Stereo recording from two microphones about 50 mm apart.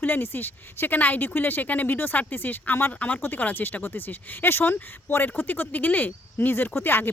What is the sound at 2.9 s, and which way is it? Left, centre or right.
Speech, left.